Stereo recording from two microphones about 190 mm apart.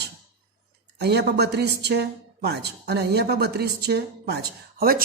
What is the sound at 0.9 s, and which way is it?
A woman's voice, 60° right (ahead or behind).